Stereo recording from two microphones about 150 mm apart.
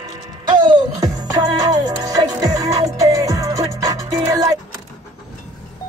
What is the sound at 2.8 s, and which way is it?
Music, 20° right (ahead or behind).